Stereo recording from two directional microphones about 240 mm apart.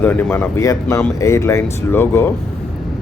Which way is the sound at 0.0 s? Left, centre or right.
Centre.